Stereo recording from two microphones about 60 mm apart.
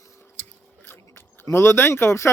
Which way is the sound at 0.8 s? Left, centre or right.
Left.